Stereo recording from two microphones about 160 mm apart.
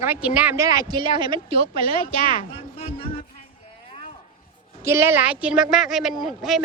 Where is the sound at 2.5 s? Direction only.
40° left (ahead or behind).